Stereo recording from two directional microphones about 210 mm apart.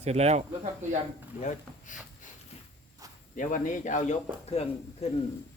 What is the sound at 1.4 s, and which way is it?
Speech, 35° left (ahead or behind).